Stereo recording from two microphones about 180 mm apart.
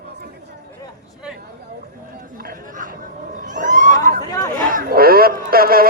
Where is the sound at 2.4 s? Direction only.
50° right (ahead or behind).